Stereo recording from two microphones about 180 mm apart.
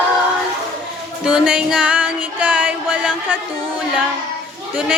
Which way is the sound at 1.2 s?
5° right (ahead or behind).